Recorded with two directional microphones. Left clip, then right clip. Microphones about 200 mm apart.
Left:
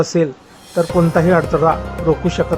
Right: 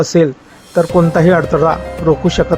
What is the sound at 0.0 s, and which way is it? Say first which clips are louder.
Speech: right 4 dB; 10° right (ahead or behind).